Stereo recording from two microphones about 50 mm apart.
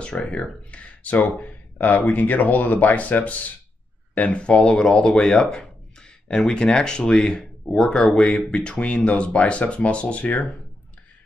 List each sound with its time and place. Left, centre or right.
0.0 s speech: left